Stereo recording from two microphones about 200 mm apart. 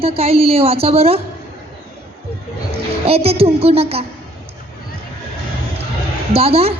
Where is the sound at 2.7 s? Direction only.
30° right (ahead or behind).